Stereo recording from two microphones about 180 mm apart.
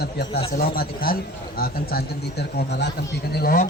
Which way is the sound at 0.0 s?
60° left (ahead or behind).